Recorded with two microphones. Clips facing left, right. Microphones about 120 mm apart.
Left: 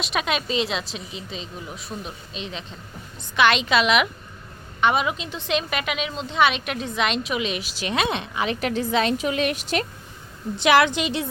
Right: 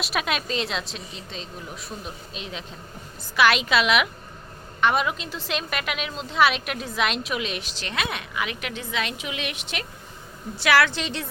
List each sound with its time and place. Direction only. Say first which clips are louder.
0.0 s a woman's voice: left 2 dB; centre (ahead or behind)
7.9 s a woman's voice: left 4 dB; 25° left (ahead or behind)
10.6 s a woman's voice: left 3 dB; 20° left (ahead or behind)